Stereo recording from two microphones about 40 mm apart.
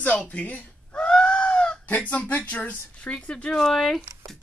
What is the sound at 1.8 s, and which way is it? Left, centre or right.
Speech, left.